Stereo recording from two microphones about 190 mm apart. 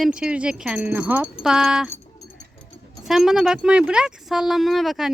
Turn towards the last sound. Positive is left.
turn(degrees=0)  # may be behind; listen again after turning